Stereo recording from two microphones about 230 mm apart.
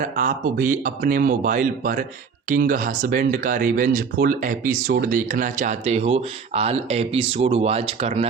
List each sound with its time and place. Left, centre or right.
0.0 s speech: right